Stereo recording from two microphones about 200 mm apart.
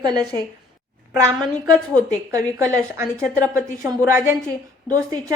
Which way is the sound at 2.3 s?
15° right (ahead or behind).